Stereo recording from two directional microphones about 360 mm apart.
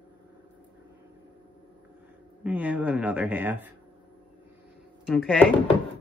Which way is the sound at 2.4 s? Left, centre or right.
Centre.